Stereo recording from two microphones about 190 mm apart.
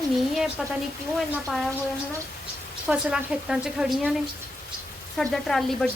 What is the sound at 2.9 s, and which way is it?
A woman's voice, 5° right (ahead or behind).